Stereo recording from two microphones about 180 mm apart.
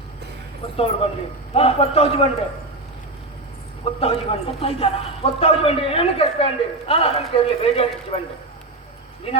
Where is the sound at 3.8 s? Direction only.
30° left (ahead or behind).